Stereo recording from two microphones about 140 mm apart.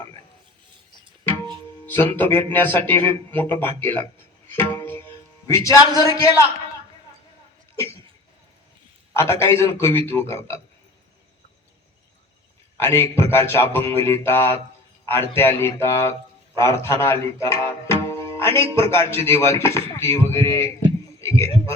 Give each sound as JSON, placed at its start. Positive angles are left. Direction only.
{"t": 1.9, "sound": "speech", "side_deg": 15}
{"t": 4.5, "sound": "music", "side_deg": 15}
{"t": 9.1, "sound": "speech", "side_deg": 20}
{"t": 12.7, "sound": "speech", "side_deg": 20}